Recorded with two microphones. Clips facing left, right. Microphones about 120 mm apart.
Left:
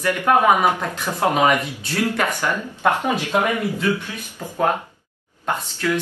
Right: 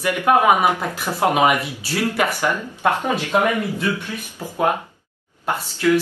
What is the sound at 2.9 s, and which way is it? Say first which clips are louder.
Speech: even; 15° left (ahead or behind).